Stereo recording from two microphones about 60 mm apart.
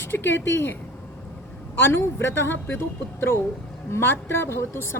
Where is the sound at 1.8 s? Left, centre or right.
Left.